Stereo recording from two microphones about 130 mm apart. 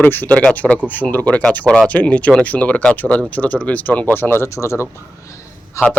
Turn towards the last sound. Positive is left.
turn(degrees=25)  # may be behind; listen again after turning